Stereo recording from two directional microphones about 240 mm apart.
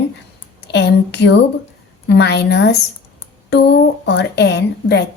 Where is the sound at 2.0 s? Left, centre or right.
Left.